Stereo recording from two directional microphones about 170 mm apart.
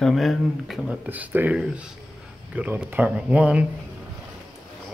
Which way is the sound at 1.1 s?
10° right (ahead or behind).